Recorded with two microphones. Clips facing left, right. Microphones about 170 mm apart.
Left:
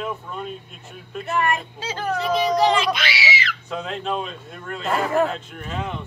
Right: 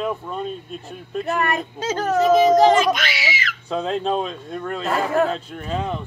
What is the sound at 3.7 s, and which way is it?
Speech, 35° right (ahead or behind).